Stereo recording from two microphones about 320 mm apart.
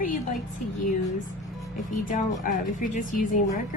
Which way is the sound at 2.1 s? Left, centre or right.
Left.